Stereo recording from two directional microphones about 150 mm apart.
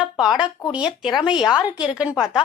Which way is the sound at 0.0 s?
5° right (ahead or behind).